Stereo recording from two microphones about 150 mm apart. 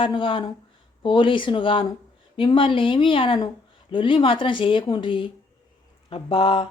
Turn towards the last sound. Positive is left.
turn(degrees=35)  # may be behind; listen again after turning